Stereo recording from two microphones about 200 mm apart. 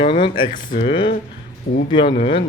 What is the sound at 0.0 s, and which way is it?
Speech, 25° left (ahead or behind).